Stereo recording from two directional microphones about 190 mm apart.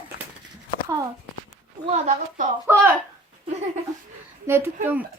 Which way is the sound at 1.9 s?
40° right (ahead or behind).